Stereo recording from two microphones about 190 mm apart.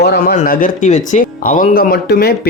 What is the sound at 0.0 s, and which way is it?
Speech, 55° left (ahead or behind).